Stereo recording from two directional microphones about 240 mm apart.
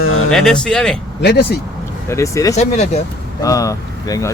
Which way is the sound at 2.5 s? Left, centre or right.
Left.